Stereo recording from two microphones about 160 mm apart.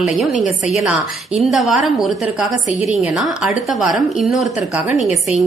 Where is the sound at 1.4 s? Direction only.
Centre (ahead or behind).